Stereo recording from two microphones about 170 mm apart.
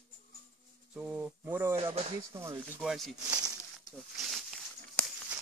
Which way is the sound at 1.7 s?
35° right (ahead or behind).